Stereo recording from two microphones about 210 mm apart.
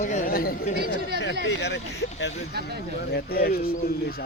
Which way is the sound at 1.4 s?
55° left (ahead or behind).